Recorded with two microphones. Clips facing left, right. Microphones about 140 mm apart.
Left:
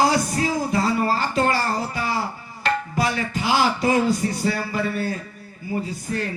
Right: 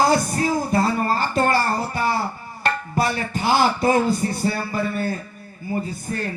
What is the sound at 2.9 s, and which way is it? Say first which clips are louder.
A man's voice: right 1 dB; 55° right (ahead or behind).